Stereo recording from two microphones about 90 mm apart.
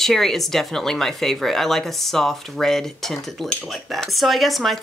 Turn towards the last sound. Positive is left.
turn(degrees=0)  # may be behind; listen again after turning